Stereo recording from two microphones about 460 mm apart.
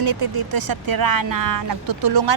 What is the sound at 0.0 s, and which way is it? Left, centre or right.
Speech, right.